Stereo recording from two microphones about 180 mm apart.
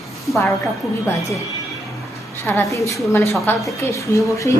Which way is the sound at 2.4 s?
15° left (ahead or behind).